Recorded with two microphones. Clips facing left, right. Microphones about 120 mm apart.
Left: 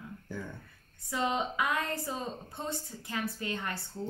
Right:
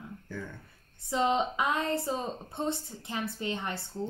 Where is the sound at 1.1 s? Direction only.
25° right (ahead or behind).